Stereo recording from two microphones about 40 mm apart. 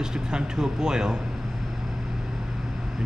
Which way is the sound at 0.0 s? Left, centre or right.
Centre.